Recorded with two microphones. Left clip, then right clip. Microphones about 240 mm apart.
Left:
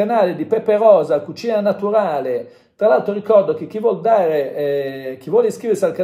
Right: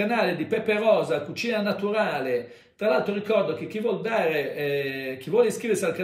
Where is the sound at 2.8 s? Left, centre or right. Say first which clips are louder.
Left 9 dB; centre.